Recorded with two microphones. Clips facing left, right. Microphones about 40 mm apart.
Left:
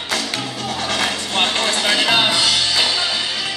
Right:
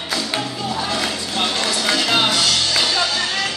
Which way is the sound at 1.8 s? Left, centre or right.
Left.